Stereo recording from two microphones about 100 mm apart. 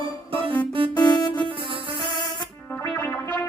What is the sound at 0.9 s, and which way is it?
Keyboard, 45° left (ahead or behind).